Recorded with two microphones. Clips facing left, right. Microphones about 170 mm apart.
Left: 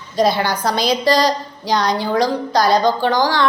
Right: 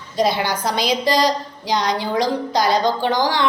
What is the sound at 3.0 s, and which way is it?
Speech, 15° right (ahead or behind).